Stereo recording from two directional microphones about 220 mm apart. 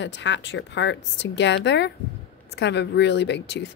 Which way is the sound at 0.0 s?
55° left (ahead or behind).